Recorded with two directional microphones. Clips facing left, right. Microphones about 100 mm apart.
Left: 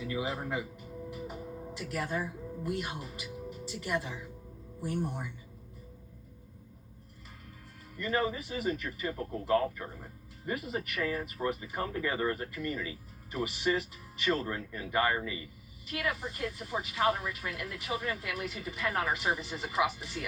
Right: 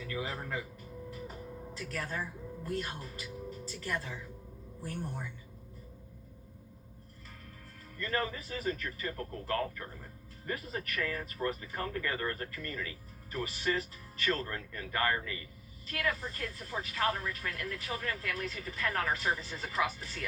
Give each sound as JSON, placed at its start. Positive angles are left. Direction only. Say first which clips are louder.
{"t": 0.0, "sound": "music", "louder": "left 4 dB", "side_deg": 15}
{"t": 2.6, "sound": "speech", "louder": "left 1 dB", "side_deg": 15}
{"t": 7.9, "sound": "speech", "louder": "left 4 dB", "side_deg": 15}